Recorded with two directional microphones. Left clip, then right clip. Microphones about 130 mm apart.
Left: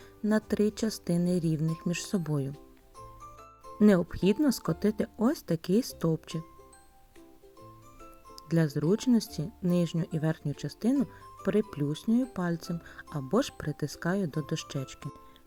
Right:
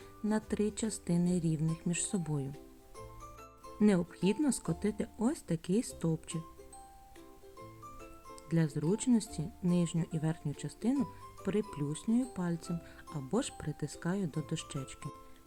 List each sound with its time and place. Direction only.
0.3 s speech: 30° left (ahead or behind)
3.8 s speech: 35° left (ahead or behind)
8.4 s speech: 35° left (ahead or behind)
10.9 s speech: 20° left (ahead or behind)